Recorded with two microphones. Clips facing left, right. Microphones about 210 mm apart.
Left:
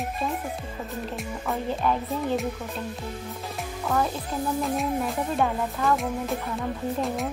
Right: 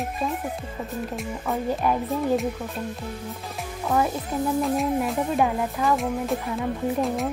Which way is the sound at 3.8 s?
10° right (ahead or behind).